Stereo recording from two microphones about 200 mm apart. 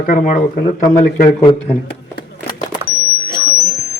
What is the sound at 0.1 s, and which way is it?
Speech, 40° left (ahead or behind).